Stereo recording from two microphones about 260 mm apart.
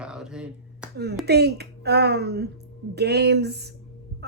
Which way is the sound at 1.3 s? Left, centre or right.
Right.